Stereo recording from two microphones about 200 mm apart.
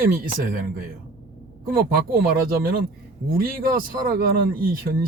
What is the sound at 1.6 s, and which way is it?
A man's voice, 45° right (ahead or behind).